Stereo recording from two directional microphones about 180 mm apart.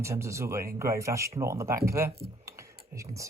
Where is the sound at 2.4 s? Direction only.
15° right (ahead or behind).